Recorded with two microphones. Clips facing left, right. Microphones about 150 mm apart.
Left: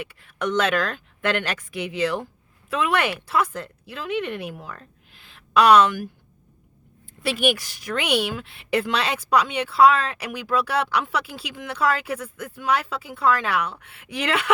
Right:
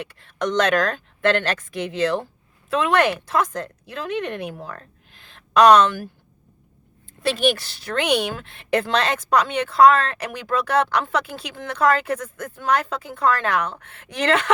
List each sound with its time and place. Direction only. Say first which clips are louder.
0.0 s speech: right 1 dB; 10° left (ahead or behind)
0.3 s speech: right 3 dB; 35° right (ahead or behind)
1.2 s speech: right 4 dB; 10° left (ahead or behind)
4.5 s speech: right 3 dB; 45° right (ahead or behind)
5.5 s speech: right 2 dB; 10° left (ahead or behind)
7.2 s speech: right 2 dB; 10° left (ahead or behind)
11.8 s speech: right 4 dB; 50° right (ahead or behind)
12.0 s speech: right 3 dB; 10° left (ahead or behind)